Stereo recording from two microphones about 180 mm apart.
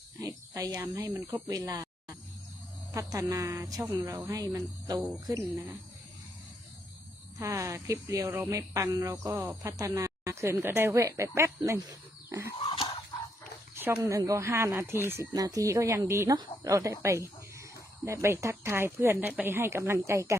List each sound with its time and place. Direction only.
0.2 s speech: 20° right (ahead or behind)
2.9 s speech: 20° right (ahead or behind)
7.3 s speech: 15° right (ahead or behind)
12.5 s a sound: 25° left (ahead or behind)
13.7 s speech: 10° right (ahead or behind)